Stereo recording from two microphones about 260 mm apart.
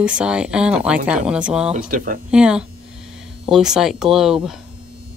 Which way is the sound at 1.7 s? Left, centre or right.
Right.